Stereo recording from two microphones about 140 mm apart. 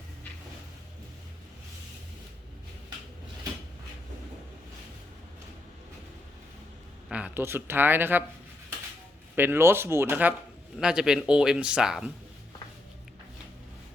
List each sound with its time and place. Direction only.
7.1 s speech: 10° right (ahead or behind)
9.3 s speech: 15° right (ahead or behind)